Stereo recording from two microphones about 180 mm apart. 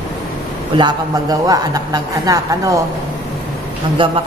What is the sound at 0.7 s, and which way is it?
A woman's voice, 25° right (ahead or behind).